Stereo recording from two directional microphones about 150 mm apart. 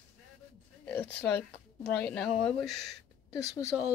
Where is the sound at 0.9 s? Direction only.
10° left (ahead or behind).